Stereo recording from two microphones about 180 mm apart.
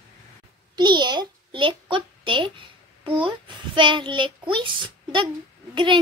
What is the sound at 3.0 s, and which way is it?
A child's voice, 30° right (ahead or behind).